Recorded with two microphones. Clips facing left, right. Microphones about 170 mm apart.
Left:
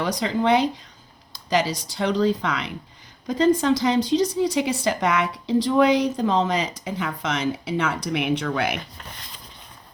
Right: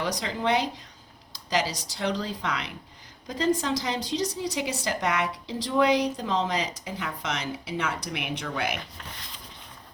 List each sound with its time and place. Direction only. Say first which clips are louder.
0.2 s a woman's voice: left 9 dB; 55° left (ahead or behind)